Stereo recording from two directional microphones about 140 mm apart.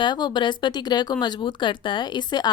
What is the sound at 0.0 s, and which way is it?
Speech, 30° left (ahead or behind).